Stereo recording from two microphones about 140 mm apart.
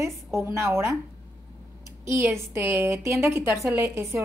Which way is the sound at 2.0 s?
20° right (ahead or behind).